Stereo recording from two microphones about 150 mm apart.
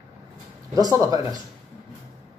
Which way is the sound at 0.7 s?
25° right (ahead or behind).